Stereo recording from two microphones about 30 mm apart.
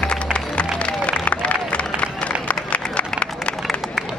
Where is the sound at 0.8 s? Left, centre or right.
Left.